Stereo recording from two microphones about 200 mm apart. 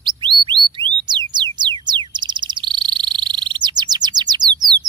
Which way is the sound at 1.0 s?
20° right (ahead or behind).